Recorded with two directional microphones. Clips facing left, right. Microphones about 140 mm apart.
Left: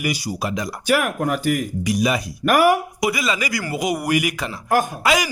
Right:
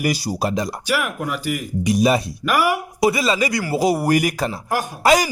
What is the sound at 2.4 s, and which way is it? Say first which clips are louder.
Speech: left 8 dB; 50° left (ahead or behind).